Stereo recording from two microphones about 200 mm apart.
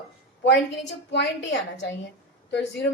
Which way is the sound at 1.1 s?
60° left (ahead or behind).